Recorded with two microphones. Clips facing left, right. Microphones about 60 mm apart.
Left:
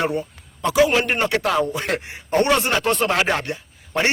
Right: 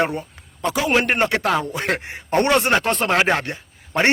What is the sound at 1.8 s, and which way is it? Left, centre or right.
A man's voice, right.